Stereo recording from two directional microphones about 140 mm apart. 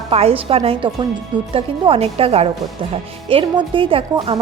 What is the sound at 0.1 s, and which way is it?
Speech, 45° right (ahead or behind).